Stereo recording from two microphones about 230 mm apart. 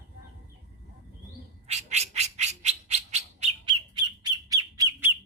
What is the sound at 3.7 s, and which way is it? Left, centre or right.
Bird, centre.